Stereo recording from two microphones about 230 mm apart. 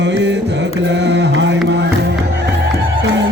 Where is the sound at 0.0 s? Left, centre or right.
Right.